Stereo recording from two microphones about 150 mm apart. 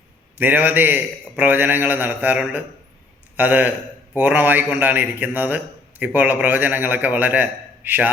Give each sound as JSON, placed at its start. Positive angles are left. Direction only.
{"t": 0.3, "sound": "a man's voice", "side_deg": -10}